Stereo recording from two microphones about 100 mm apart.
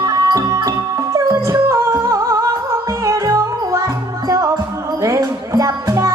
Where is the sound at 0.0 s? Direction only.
40° right (ahead or behind).